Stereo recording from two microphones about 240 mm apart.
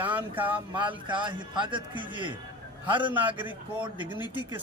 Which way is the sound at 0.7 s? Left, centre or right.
Centre.